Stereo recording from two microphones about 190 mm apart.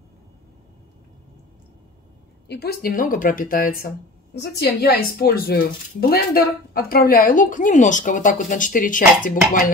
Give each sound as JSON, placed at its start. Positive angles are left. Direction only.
{"t": 2.4, "sound": "speech", "side_deg": 60}